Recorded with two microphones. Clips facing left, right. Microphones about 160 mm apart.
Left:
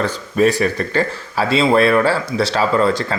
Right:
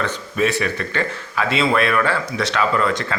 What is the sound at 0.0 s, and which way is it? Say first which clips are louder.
Speech: left 5 dB; 40° left (ahead or behind).